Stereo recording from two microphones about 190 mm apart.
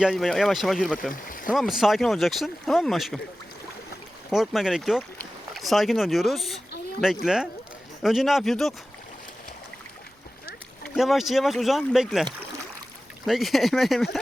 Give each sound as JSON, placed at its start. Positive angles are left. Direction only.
{"t": 0.0, "sound": "speech", "side_deg": 0}
{"t": 1.1, "sound": "a sound", "side_deg": 45}
{"t": 1.5, "sound": "speech", "side_deg": 0}
{"t": 4.3, "sound": "speech", "side_deg": 0}
{"t": 8.0, "sound": "speech", "side_deg": 0}
{"t": 10.8, "sound": "speech", "side_deg": 0}